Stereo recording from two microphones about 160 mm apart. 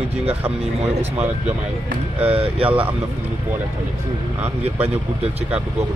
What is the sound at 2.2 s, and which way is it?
Speech, 40° right (ahead or behind).